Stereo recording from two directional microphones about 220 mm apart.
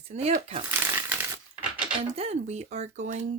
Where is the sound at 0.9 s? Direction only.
10° right (ahead or behind).